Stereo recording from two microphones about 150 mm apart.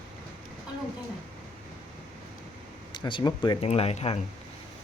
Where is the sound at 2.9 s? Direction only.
30° left (ahead or behind).